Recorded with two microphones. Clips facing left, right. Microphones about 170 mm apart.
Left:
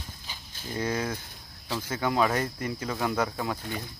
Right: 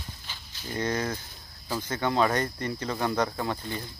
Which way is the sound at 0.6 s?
10° left (ahead or behind).